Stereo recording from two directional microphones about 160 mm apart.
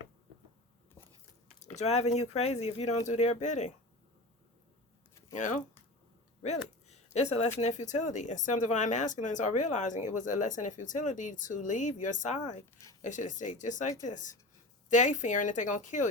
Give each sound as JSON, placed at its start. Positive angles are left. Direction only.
{"t": 1.5, "sound": "speech", "side_deg": 45}
{"t": 5.3, "sound": "speech", "side_deg": 50}